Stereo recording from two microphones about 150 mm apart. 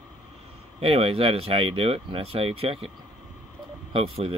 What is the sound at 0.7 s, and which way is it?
Speech, 40° right (ahead or behind).